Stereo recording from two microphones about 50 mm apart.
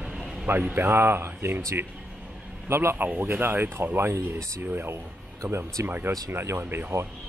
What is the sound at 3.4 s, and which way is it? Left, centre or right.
Speech, right.